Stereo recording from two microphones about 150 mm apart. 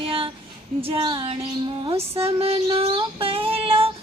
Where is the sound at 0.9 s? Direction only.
35° right (ahead or behind).